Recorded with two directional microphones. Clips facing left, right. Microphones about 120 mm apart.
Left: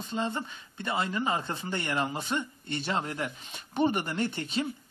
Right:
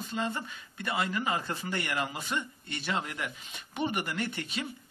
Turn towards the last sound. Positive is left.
turn(degrees=30)  # may be behind; listen again after turning